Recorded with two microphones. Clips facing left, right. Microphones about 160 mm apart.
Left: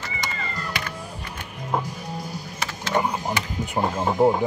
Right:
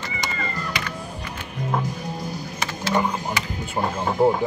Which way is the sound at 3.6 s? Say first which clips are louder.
Left 2 dB; 15° left (ahead or behind).